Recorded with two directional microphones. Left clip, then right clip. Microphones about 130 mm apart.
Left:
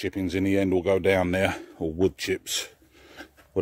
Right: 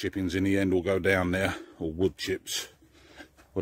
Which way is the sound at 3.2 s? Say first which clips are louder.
Left 5 dB; 40° left (ahead or behind).